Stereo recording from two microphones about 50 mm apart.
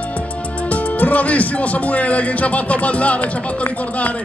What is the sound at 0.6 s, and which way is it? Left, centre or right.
Speech, left.